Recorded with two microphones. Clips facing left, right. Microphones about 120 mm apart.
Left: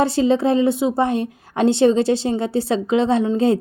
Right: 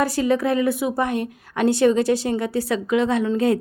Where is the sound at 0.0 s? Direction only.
25° left (ahead or behind).